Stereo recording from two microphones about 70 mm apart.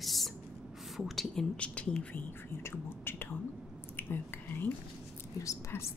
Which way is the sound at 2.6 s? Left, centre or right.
Left.